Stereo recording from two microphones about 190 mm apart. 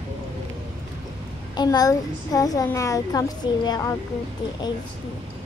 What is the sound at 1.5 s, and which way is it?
Child singing, 20° left (ahead or behind).